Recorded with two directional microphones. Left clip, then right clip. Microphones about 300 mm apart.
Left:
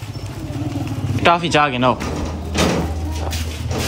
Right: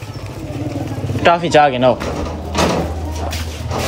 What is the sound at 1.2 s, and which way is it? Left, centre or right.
Speech, centre.